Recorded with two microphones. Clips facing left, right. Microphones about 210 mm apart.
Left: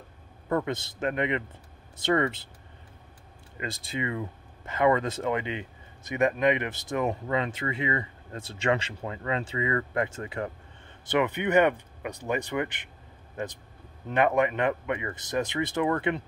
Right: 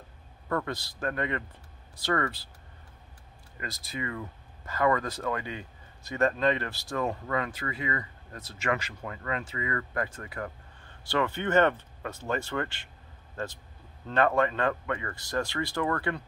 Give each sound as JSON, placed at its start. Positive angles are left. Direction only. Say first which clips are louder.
{"t": 0.5, "sound": "speech", "louder": "left 4 dB", "side_deg": 20}
{"t": 3.5, "sound": "speech", "louder": "left 4 dB", "side_deg": 25}